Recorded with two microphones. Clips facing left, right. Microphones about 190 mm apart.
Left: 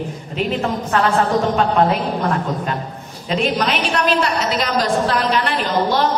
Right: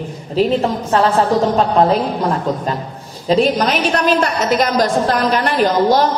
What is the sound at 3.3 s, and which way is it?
A woman's voice, 35° right (ahead or behind).